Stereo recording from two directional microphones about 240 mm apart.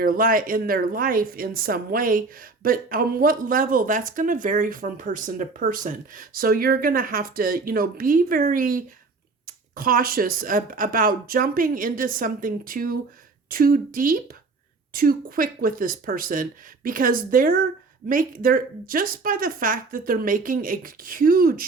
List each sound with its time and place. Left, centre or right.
0.0 s a woman's voice: right